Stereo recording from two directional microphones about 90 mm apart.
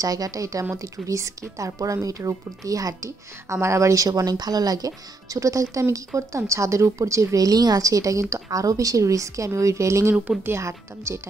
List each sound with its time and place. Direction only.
0.0 s speech: 40° right (ahead or behind)